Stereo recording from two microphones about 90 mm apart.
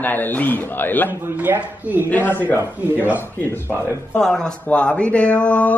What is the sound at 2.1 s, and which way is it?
Speech, 20° left (ahead or behind).